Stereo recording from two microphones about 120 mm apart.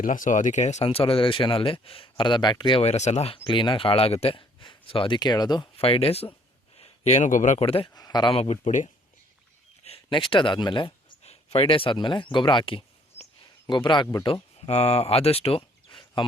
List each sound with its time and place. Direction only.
0.1 s speech: 90° left; by 2.8 s 40° left (ahead or behind)
2.8 s speech: 70° left (ahead or behind); by 5.6 s 35° left (ahead or behind)
5.7 s speech: 55° left (ahead or behind)
6.7 s speech: 65° left (ahead or behind); by 7.6 s 90° left
7.6 s speech: 50° left (ahead or behind)
7.9 s speech: 35° left (ahead or behind)
8.3 s speech: 60° left (ahead or behind); by 8.9 s 80° left
9.8 s speech: 50° left (ahead or behind)
11.2 s speech: 60° left (ahead or behind); by 14.3 s 35° left (ahead or behind)
14.7 s speech: 60° left (ahead or behind); by 16.2 s 45° left (ahead or behind)